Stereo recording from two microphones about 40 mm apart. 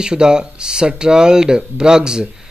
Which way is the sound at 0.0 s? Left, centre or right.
Centre.